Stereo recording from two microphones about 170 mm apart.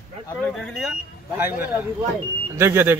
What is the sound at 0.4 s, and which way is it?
Speech, 5° left (ahead or behind).